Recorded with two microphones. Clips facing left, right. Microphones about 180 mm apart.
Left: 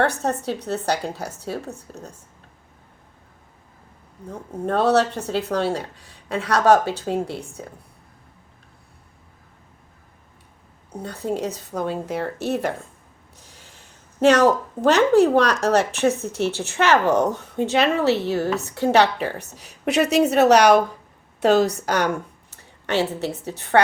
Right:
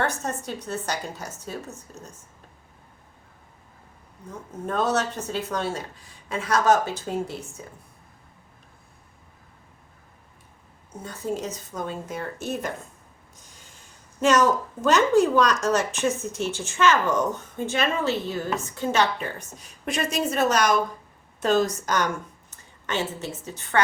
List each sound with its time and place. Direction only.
0.2 s speech: 65° left (ahead or behind)
4.3 s speech: 60° left (ahead or behind)
10.9 s speech: 65° left (ahead or behind)
13.4 s a sound: 65° left (ahead or behind)
14.2 s a woman's voice: 65° left (ahead or behind)